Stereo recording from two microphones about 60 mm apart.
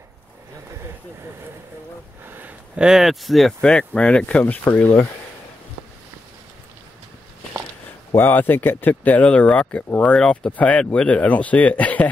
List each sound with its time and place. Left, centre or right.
2.7 s speech: centre
3.0 s speech: centre
3.6 s speech: centre
8.2 s speech: left